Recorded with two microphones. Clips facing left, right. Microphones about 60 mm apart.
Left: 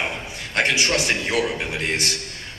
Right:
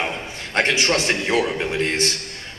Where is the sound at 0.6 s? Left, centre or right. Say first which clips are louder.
Right 1 dB; right.